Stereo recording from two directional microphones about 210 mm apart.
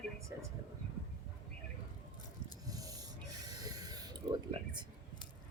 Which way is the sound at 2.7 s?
15° right (ahead or behind).